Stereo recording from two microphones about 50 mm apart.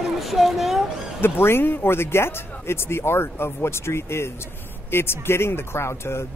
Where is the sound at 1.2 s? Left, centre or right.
Left.